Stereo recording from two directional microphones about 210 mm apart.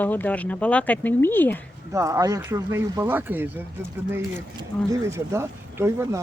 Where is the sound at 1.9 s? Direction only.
15° right (ahead or behind).